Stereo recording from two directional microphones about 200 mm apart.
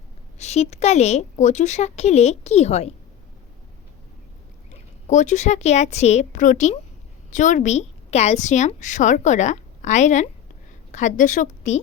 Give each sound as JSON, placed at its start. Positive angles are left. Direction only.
{"t": 0.3, "sound": "a woman's voice", "side_deg": 35}
{"t": 5.0, "sound": "a woman's voice", "side_deg": 35}